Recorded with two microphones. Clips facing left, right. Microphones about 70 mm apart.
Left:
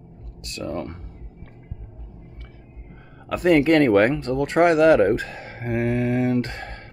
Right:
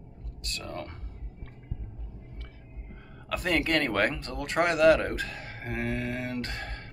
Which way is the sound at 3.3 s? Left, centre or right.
Left.